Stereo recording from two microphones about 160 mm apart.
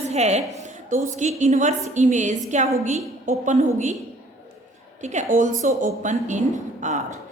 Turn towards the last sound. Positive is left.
turn(degrees=-50)  # may be behind; listen again after turning